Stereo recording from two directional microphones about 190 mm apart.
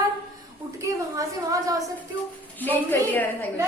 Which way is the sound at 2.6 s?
10° left (ahead or behind).